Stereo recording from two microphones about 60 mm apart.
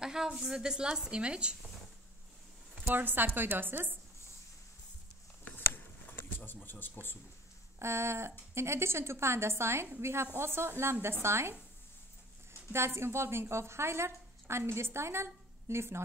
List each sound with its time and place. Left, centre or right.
0.0 s a woman's voice: centre
2.7 s a woman's voice: right
6.1 s speech: left
7.8 s a woman's voice: right
12.7 s a woman's voice: right